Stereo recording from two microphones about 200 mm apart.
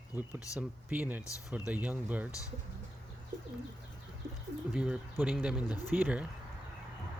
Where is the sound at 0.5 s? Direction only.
5° right (ahead or behind).